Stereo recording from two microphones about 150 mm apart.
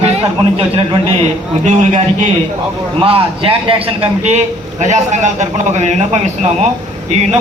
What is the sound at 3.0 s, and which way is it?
A man's voice, 40° right (ahead or behind).